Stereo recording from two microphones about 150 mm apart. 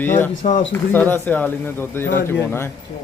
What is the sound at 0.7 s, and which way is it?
Speech, 10° left (ahead or behind).